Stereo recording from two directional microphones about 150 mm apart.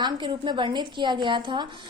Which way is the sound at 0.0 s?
30° right (ahead or behind).